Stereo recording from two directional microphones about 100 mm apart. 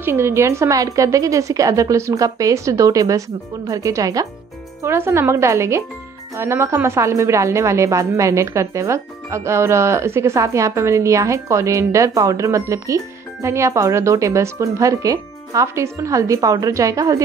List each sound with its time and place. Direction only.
0.0 s speech: 25° right (ahead or behind)
4.8 s speech: 25° right (ahead or behind)